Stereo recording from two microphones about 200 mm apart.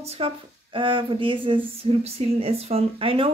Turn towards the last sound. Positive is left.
turn(degrees=-25)  # may be behind; listen again after turning